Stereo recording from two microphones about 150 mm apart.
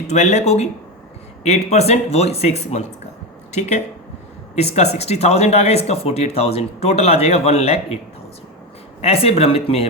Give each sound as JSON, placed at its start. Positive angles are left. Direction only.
{"t": 0.1, "sound": "speech", "side_deg": 50}
{"t": 9.0, "sound": "speech", "side_deg": 40}